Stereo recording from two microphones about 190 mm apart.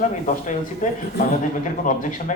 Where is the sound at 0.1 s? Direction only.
40° left (ahead or behind).